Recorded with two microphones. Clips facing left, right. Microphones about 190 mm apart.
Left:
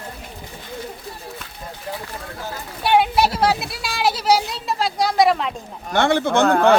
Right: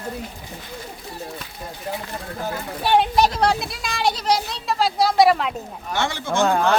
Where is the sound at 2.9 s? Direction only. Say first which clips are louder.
Left 1 dB; 10° left (ahead or behind).